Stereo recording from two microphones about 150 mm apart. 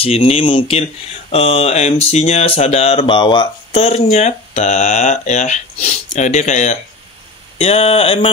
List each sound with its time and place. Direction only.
0.0 s speech: 40° left (ahead or behind)